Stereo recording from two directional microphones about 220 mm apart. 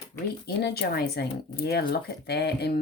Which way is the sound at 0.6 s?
50° left (ahead or behind).